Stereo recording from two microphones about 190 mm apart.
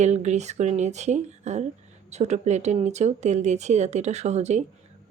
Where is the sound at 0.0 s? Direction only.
35° right (ahead or behind).